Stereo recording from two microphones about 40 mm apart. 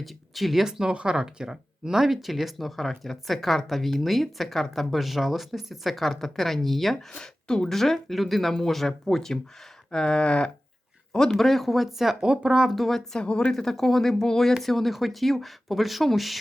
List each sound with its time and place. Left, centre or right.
0.0 s speech: centre
0.6 s speech: centre
7.2 s speech: centre
7.8 s speech: centre
9.9 s a sound: centre
11.3 s speech: centre
12.2 s speech: right
12.7 s speech: centre
13.1 s a sound: left
13.5 s speech: centre